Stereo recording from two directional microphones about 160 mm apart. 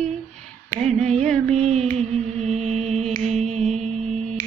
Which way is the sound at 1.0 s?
45° right (ahead or behind).